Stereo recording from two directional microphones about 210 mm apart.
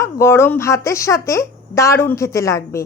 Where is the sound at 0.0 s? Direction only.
10° left (ahead or behind).